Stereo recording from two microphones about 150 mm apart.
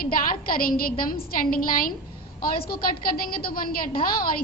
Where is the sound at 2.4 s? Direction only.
85° left.